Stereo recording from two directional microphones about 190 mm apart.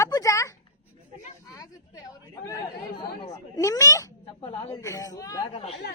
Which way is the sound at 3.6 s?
15° left (ahead or behind).